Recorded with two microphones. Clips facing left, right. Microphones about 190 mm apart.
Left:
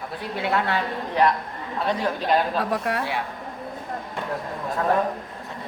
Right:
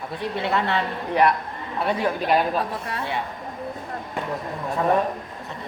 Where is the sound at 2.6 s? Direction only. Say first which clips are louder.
Left 3 dB; 70° left (ahead or behind).